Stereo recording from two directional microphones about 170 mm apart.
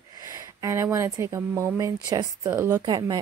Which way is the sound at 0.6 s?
15° right (ahead or behind).